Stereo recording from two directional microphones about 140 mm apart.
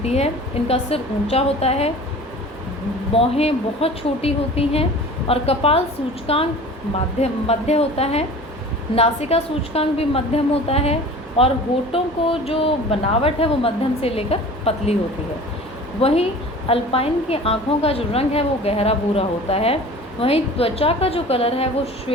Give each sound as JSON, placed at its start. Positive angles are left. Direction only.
{"t": 0.0, "sound": "speech", "side_deg": 50}
{"t": 3.1, "sound": "speech", "side_deg": 45}
{"t": 16.0, "sound": "speech", "side_deg": 45}